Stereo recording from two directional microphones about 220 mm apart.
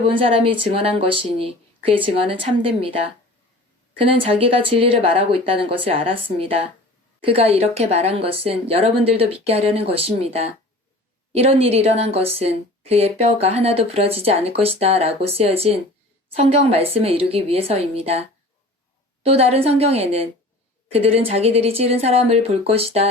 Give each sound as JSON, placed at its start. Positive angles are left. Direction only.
{"t": 0.0, "sound": "speech", "side_deg": -25}